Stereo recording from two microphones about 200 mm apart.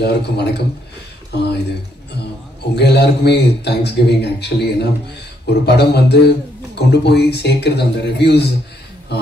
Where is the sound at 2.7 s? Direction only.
55° left (ahead or behind).